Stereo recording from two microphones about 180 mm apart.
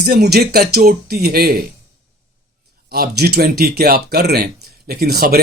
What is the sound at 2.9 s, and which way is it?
A man's voice, 60° right (ahead or behind).